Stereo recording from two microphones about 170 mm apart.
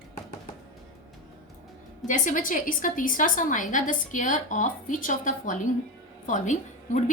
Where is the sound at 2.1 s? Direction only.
50° left (ahead or behind).